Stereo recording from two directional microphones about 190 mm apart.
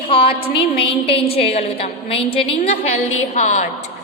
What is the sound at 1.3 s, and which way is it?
A woman's voice, 30° left (ahead or behind).